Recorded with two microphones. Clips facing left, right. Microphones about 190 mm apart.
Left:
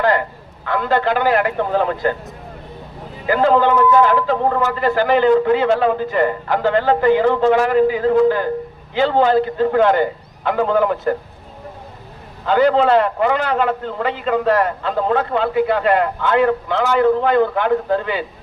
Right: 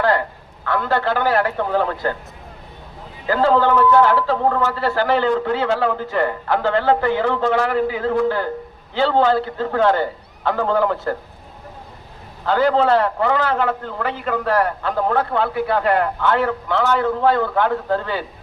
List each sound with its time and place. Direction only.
0.7 s a man's voice: 20° left (ahead or behind)
3.2 s a man's voice: 15° left (ahead or behind)
12.5 s a man's voice: 20° left (ahead or behind)